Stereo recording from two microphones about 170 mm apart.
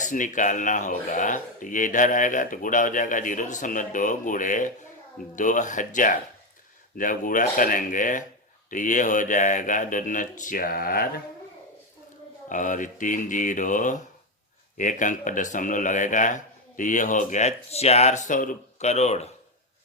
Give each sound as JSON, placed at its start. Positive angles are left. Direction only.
{"t": 0.0, "sound": "speech", "side_deg": 50}
{"t": 12.5, "sound": "speech", "side_deg": 50}